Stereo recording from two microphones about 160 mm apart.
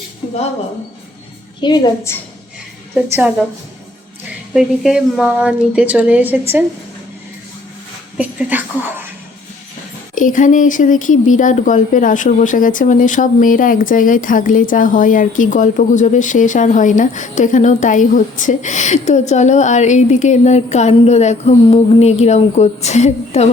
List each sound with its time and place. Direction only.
1.6 s a woman's voice: 25° left (ahead or behind)
2.9 s a woman's voice: 10° right (ahead or behind)
4.5 s a woman's voice: 5° right (ahead or behind)
8.2 s a woman's voice: 10° right (ahead or behind)
10.2 s speech: 55° left (ahead or behind)